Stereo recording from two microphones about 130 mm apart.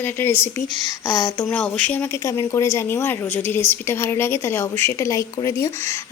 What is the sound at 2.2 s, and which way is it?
A woman's voice, 25° left (ahead or behind).